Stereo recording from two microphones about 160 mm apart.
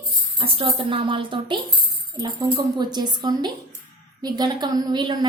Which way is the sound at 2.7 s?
25° right (ahead or behind).